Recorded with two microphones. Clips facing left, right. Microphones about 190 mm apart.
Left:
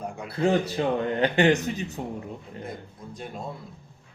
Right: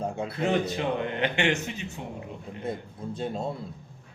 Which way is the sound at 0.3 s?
35° left (ahead or behind).